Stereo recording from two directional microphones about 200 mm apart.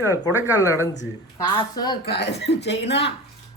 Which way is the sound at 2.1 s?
55° left (ahead or behind).